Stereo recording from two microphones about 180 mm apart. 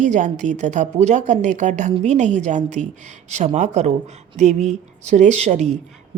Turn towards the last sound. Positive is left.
turn(degrees=-40)  # may be behind; listen again after turning